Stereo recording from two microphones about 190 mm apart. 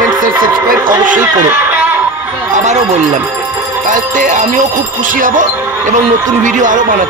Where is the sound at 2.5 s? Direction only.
35° right (ahead or behind).